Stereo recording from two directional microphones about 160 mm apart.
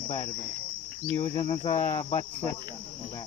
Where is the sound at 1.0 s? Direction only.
10° left (ahead or behind).